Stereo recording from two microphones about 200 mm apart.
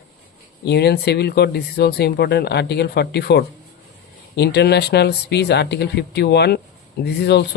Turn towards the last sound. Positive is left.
turn(degrees=60)  # may be behind; listen again after turning